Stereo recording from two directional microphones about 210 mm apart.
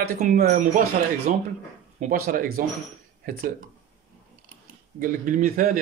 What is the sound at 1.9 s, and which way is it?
Speech, 40° right (ahead or behind).